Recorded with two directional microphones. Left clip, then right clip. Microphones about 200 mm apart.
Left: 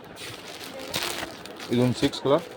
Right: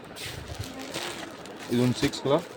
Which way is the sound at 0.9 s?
55° left (ahead or behind).